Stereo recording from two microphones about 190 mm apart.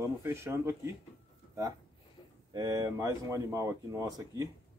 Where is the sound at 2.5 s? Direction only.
20° right (ahead or behind).